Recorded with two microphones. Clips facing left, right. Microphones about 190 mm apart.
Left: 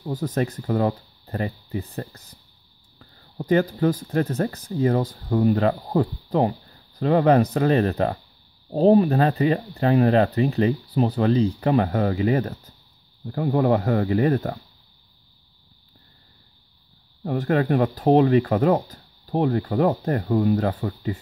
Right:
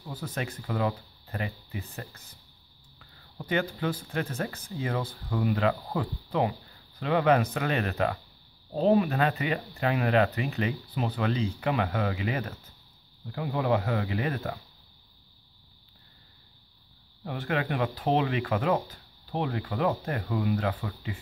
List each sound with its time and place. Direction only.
0.0 s speech: 40° left (ahead or behind)
17.2 s speech: 40° left (ahead or behind)